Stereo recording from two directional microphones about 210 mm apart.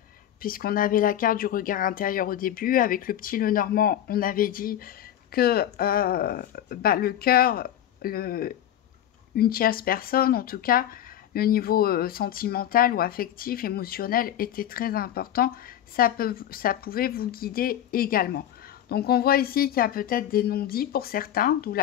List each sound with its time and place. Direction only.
0.4 s speech: 45° left (ahead or behind)